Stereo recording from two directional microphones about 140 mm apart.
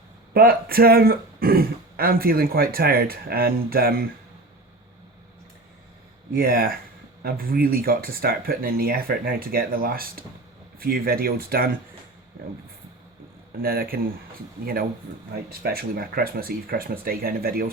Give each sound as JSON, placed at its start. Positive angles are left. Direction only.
{"t": 0.3, "sound": "speech", "side_deg": -90}
{"t": 6.3, "sound": "speech", "side_deg": -90}
{"t": 13.6, "sound": "speech", "side_deg": -90}